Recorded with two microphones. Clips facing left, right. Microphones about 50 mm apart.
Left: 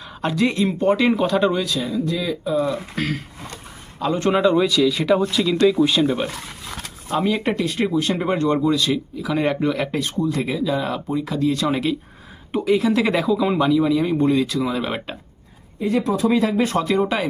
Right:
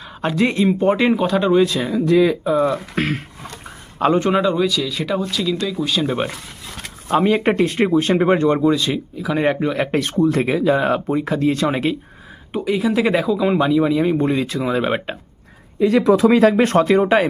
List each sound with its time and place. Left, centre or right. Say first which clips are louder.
0.2 s speech: right 2 dB; right
1.1 s speech: right 1 dB; centre
1.6 s speech: right 5 dB; right
1.9 s speech: right 8 dB; right
2.4 s speech: right 4 dB; right
4.2 s speech: even; centre
7.3 s speech: right 4 dB; right; by 9.8 s centre
9.9 s speech: right 5 dB; right
12.5 s speech: left 1 dB; centre; by 15.2 s right
15.8 s speech: right 6 dB; right